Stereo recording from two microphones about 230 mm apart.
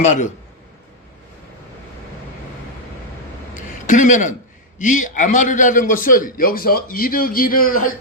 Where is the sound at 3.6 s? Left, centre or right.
Left.